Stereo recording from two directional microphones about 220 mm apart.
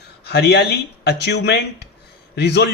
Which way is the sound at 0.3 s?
50° left (ahead or behind).